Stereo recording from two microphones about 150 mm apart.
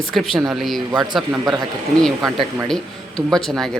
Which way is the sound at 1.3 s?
15° right (ahead or behind).